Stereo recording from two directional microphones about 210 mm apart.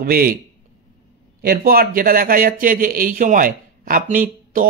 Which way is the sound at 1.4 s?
45° right (ahead or behind).